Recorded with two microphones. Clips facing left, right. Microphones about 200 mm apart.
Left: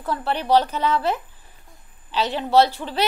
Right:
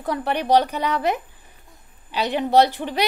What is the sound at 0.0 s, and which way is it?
A woman's voice, 15° right (ahead or behind).